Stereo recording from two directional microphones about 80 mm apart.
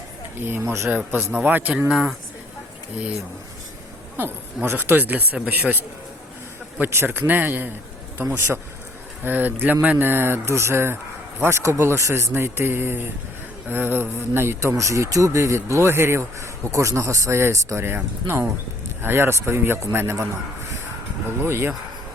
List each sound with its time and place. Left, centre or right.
0.3 s speech: right
0.9 s a man's voice: centre
1.9 s speech: centre
3.0 s speech: centre
4.2 s speech: right
6.7 s speech: right
12.3 s speech: right
21.4 s speech: right